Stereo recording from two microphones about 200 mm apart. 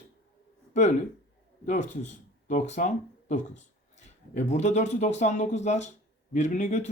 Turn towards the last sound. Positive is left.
turn(degrees=35)  # may be behind; listen again after turning